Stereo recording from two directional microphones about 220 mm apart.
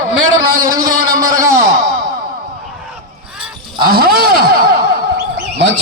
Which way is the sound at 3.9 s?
45° right (ahead or behind).